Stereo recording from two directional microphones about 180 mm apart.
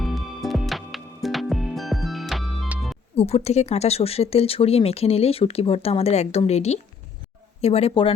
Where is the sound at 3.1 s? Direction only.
35° left (ahead or behind).